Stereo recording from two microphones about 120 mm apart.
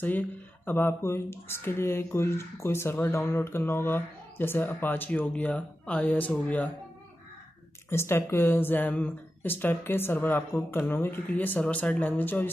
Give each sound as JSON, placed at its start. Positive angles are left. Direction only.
{"t": 0.0, "sound": "speech", "side_deg": 15}
{"t": 7.9, "sound": "speech", "side_deg": 20}